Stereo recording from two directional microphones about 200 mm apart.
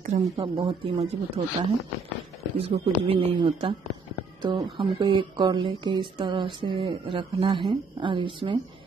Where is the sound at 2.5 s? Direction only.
30° right (ahead or behind).